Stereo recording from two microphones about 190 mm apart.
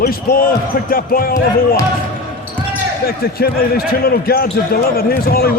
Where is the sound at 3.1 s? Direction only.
55° left (ahead or behind).